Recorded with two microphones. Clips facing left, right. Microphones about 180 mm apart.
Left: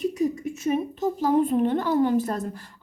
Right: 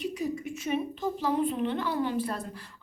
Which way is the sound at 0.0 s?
45° left (ahead or behind).